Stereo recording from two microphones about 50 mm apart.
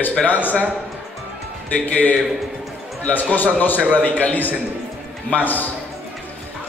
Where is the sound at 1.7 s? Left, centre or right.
Left.